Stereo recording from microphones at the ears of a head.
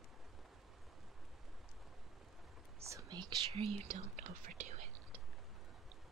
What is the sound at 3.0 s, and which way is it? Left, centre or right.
Whispering, right.